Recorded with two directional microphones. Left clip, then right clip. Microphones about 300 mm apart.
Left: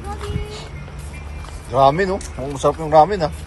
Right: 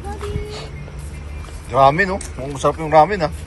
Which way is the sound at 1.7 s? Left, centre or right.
Centre.